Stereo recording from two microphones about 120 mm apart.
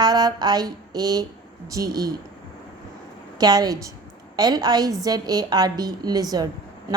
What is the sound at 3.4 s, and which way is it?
A woman's voice, 35° right (ahead or behind).